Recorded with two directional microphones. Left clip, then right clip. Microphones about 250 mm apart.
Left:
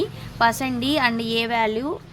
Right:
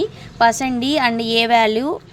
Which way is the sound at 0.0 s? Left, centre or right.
Centre.